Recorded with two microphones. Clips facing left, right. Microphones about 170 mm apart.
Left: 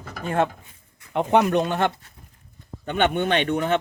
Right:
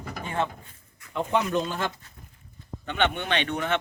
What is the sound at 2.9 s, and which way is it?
Speech, 45° left (ahead or behind).